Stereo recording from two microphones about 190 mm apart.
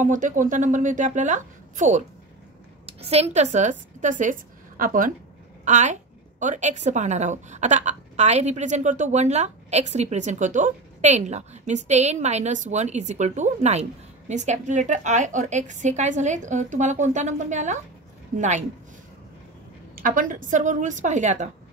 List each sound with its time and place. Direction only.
0.0 s a woman's voice: 40° right (ahead or behind)
20.0 s a woman's voice: 45° right (ahead or behind)